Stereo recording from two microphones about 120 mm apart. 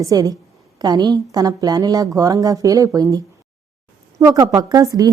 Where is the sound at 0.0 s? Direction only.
30° right (ahead or behind).